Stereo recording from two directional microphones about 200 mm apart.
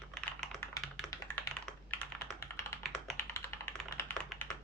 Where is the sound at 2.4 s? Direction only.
15° left (ahead or behind).